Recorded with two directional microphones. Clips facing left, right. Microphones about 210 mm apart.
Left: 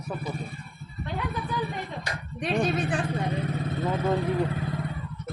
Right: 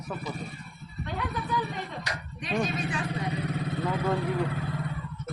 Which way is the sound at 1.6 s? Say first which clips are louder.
Left 1 dB; 55° left (ahead or behind).